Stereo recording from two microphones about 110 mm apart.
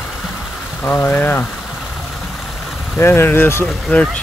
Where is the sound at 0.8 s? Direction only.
15° left (ahead or behind).